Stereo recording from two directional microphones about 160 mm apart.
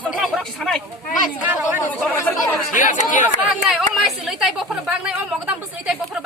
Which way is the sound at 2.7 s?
55° left (ahead or behind).